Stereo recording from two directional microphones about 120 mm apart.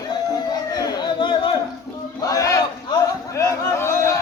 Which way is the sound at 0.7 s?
40° left (ahead or behind).